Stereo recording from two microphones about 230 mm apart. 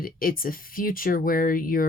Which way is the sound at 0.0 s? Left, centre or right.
Left.